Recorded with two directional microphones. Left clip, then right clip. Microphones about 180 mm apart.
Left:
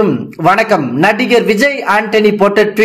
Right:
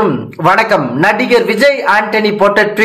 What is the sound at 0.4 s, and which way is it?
A man's voice, 40° left (ahead or behind).